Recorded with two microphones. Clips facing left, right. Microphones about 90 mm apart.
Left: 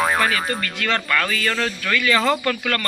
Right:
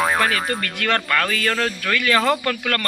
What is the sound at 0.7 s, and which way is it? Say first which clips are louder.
Speech: right 1 dB; 60° right (ahead or behind).